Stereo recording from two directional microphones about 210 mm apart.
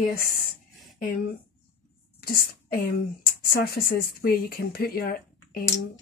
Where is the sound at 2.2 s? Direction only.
45° left (ahead or behind).